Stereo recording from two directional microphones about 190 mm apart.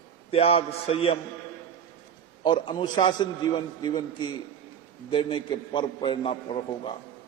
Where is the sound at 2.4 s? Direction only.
25° left (ahead or behind).